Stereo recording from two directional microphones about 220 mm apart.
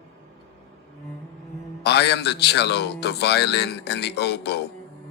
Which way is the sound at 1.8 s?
50° left (ahead or behind).